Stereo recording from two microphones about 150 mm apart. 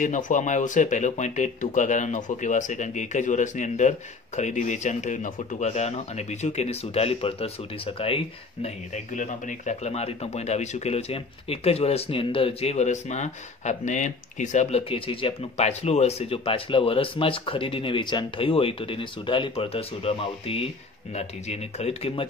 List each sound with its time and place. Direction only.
0.0 s speech: 60° left (ahead or behind); by 8.2 s 40° left (ahead or behind)
8.6 s speech: 55° left (ahead or behind)